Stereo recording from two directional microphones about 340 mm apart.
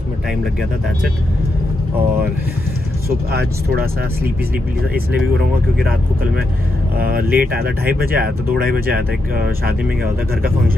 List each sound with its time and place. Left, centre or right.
3.3 s speech: right
7.0 s speech: right